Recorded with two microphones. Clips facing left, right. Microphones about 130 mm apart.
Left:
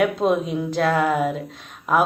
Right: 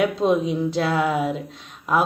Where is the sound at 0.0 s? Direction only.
Centre (ahead or behind).